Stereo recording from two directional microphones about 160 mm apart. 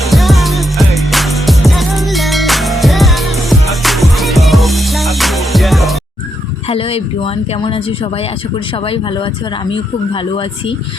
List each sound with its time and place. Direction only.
0.0 s music: centre (ahead or behind)
6.7 s speech: 35° left (ahead or behind)